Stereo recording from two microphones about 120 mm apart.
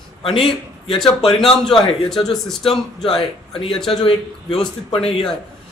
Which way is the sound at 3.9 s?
50° left (ahead or behind).